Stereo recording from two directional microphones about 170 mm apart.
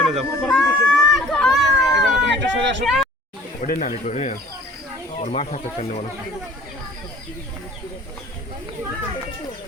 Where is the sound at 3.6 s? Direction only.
50° left (ahead or behind).